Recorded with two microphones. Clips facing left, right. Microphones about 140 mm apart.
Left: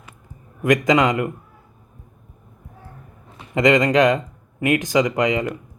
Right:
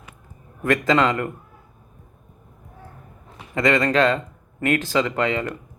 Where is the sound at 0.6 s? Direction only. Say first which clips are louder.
Left 2 dB; 15° left (ahead or behind).